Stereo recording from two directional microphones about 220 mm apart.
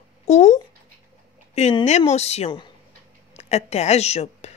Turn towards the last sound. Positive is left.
turn(degrees=30)  # may be behind; listen again after turning